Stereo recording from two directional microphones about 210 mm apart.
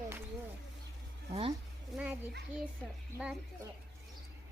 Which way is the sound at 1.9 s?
5° right (ahead or behind).